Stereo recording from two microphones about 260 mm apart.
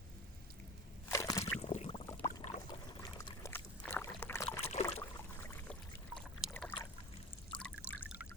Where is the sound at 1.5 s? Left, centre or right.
Left.